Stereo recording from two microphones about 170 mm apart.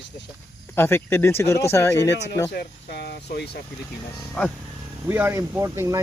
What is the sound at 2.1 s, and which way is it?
Speech, 90° left.